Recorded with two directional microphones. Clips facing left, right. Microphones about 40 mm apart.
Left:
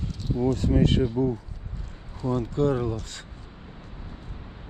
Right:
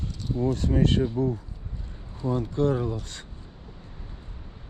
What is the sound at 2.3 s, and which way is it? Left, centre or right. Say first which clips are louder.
Speech: left 1 dB; left.